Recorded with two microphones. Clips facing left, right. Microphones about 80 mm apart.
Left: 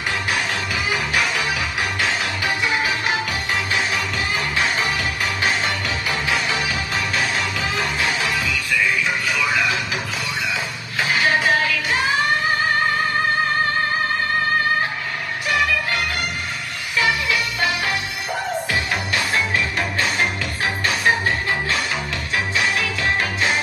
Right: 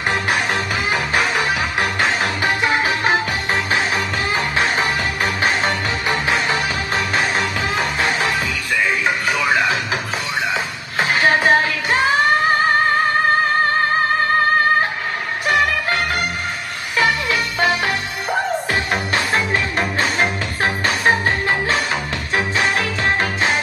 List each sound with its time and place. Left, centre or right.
0.1 s music: right
4.6 s music: right
15.4 s music: right